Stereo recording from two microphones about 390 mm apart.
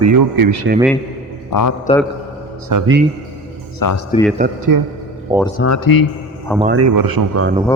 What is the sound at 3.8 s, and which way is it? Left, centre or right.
Speech, left.